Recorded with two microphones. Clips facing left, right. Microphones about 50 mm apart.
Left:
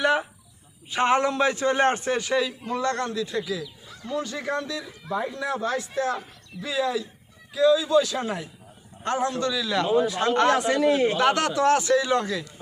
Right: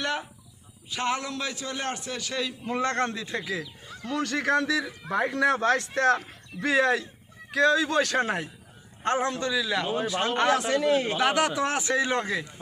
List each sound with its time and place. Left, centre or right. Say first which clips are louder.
0.0 s a sound: left 7 dB; centre
0.9 s a man's voice: left 8 dB; left
2.3 s a man's voice: left 5 dB; centre
2.6 s a man's voice: even; right
4.0 s speech: right 2 dB; right
9.0 s a man's voice: left 1 dB; right
9.5 s speech: left 3 dB; centre
10.5 s a man's voice: left 2 dB; centre
11.2 s a man's voice: left 3 dB; centre; by 12.5 s right